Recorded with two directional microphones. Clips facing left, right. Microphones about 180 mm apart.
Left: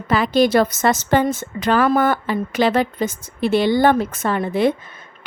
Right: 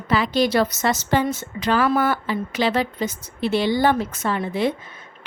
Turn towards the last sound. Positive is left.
turn(degrees=55)  # may be behind; listen again after turning